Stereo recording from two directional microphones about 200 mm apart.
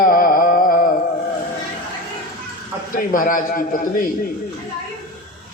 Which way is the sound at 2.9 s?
45° left (ahead or behind).